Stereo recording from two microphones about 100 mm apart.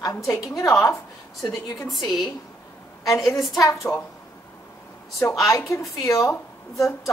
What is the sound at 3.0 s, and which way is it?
Speech, 30° left (ahead or behind).